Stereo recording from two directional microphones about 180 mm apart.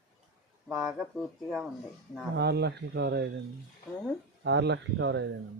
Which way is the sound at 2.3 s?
65° right (ahead or behind).